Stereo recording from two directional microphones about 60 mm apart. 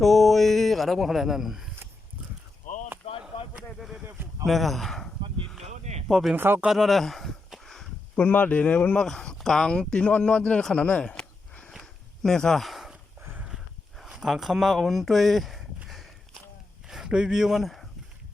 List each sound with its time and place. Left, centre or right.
0.0 s speech: centre
3.8 s speech: centre
4.4 s a sound: centre
6.1 s speech: centre
6.3 s speech: right
6.7 s a sound: centre
8.1 s speech: left
9.0 s speech: centre
10.9 s walk: centre
11.8 s a sound: centre
14.0 s speech: centre
17.1 s speech: centre